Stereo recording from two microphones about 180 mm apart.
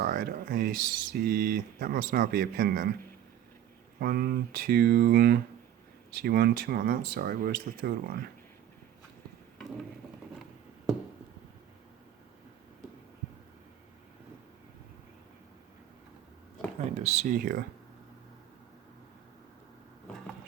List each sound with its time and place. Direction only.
0.0 s speech: 55° right (ahead or behind)
4.0 s speech: 55° right (ahead or behind)
16.9 s speech: 40° right (ahead or behind)